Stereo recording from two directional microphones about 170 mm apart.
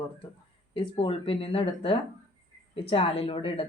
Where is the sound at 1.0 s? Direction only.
35° left (ahead or behind).